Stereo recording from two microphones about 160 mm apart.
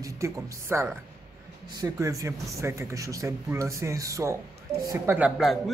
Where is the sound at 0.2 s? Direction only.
15° right (ahead or behind).